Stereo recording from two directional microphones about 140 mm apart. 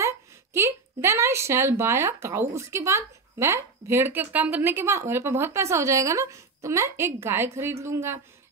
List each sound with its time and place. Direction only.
0.0 s a woman's voice: 20° right (ahead or behind)